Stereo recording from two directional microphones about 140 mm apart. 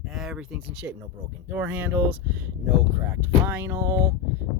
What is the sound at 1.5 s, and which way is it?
Speech, 15° right (ahead or behind).